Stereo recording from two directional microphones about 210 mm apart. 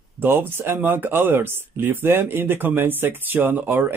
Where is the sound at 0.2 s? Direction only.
10° right (ahead or behind).